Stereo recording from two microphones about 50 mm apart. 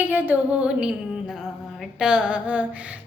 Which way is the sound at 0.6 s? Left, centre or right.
Centre.